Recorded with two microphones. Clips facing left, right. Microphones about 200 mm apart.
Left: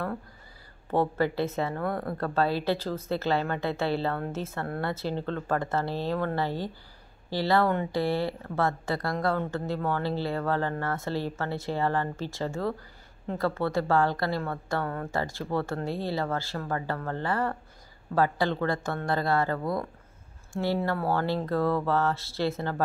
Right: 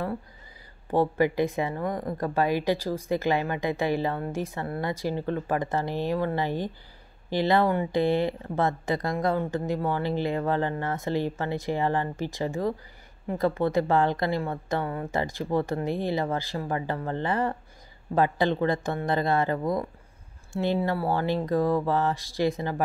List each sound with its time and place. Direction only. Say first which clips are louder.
0.9 s speech: right 3 dB; 15° right (ahead or behind)